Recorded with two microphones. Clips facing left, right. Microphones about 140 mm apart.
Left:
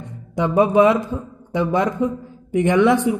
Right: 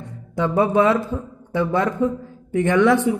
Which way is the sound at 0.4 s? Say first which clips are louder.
Left 3 dB; 15° left (ahead or behind).